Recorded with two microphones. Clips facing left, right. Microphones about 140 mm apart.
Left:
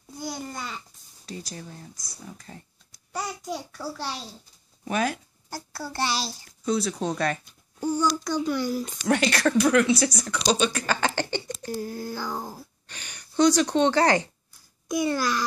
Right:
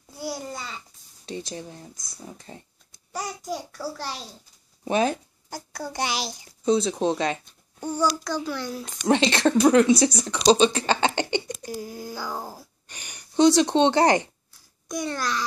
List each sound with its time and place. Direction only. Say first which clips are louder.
0.2 s babbling: right 1 dB; 5° right (ahead or behind)
1.2 s speech: right 4 dB; 25° right (ahead or behind)
3.1 s a sound: right 1 dB; centre (ahead or behind)
4.8 s a child's voice: right 4 dB; 25° right (ahead or behind)
7.4 s a child's voice: left 4 dB; centre (ahead or behind)
9.0 s speech: right 3 dB; 25° right (ahead or behind)
14.9 s a child's voice: left 3 dB; 5° left (ahead or behind)